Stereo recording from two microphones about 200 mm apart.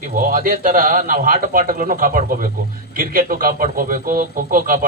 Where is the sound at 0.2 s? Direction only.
45° right (ahead or behind).